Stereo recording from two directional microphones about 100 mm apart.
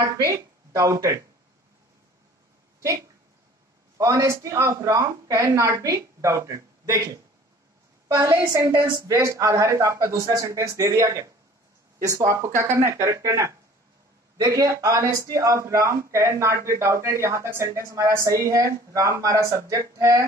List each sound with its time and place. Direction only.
0.0 s speech: 35° right (ahead or behind)
4.0 s a man's voice: 30° right (ahead or behind)
8.2 s a woman's voice: 30° right (ahead or behind)